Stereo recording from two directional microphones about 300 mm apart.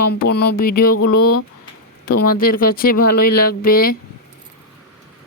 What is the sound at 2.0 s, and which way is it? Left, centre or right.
Speech, left.